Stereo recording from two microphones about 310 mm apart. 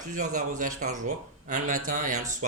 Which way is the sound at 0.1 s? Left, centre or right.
Right.